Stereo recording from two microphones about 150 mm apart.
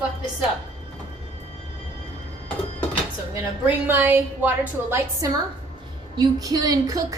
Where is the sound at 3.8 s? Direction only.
10° right (ahead or behind).